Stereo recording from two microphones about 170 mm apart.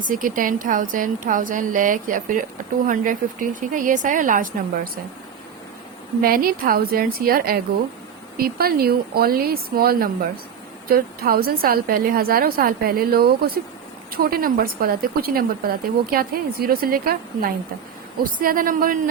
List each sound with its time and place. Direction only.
0.0 s a woman's voice: 50° right (ahead or behind)
6.2 s a woman's voice: 60° right (ahead or behind)